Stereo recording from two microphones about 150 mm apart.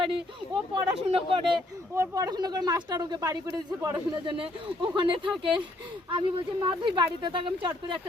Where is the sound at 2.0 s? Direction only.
20° right (ahead or behind).